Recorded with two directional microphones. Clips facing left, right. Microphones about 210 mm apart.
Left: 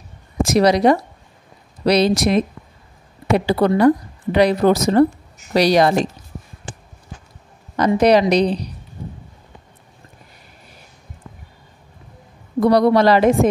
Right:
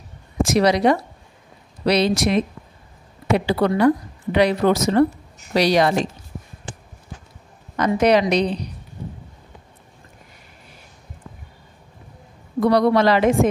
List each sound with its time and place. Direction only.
0.4 s a woman's voice: 40° left (ahead or behind)
7.7 s a woman's voice: 35° left (ahead or behind)
12.5 s a woman's voice: 35° left (ahead or behind)